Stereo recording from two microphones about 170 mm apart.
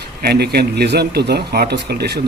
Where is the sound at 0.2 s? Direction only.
70° right (ahead or behind).